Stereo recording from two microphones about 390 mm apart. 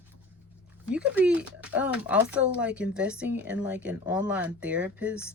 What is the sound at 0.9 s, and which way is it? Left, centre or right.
Speech, centre.